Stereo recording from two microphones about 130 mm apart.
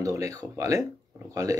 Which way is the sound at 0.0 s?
25° right (ahead or behind).